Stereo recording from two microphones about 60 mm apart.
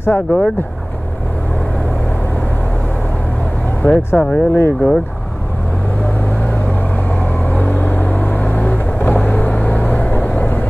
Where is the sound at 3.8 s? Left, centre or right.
Left.